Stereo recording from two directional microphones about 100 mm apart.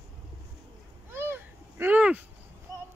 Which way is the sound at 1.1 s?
25° right (ahead or behind).